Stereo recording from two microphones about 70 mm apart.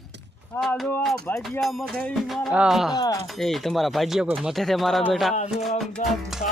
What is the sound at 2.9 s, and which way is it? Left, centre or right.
Speech, left.